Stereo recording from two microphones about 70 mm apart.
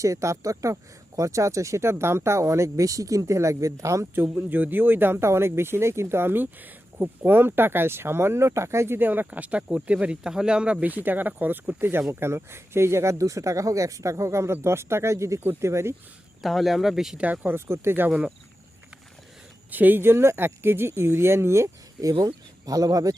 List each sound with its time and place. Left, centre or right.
0.0 s speech: right
4.4 s speech: right
9.0 s speech: right
16.4 s speech: centre
17.2 s speech: right
19.7 s speech: right
22.0 s speech: right